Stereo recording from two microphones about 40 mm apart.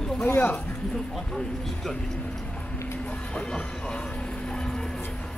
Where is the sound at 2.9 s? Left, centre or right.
Left; by 5.0 s centre.